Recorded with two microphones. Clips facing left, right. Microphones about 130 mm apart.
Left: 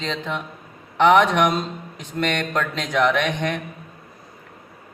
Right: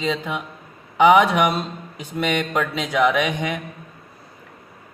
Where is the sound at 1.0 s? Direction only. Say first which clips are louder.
Right 1 dB; 5° right (ahead or behind).